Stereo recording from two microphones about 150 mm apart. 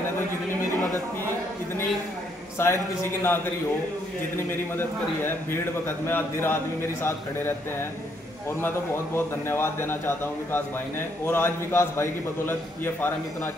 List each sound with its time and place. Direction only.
2.6 s a man's voice: 15° left (ahead or behind)
4.5 s a man's voice: 15° left (ahead or behind)
8.5 s a man's voice: 15° left (ahead or behind)